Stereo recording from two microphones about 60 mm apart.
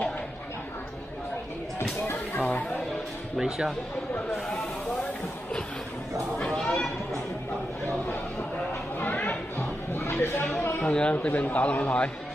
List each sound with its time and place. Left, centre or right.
1.8 s a sound: left
2.4 s speech: left
3.3 s speech: centre
6.3 s speech: centre
9.0 s chatter: left
9.6 s a sound: left
10.9 s a man's voice: centre